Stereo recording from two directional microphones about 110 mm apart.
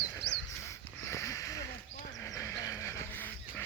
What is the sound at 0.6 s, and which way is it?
Sniff, 30° left (ahead or behind).